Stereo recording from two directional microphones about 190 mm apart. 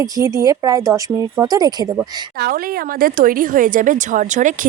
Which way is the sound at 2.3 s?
50° right (ahead or behind).